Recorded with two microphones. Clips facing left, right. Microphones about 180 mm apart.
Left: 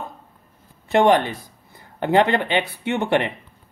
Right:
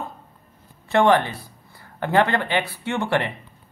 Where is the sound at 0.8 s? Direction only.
20° left (ahead or behind).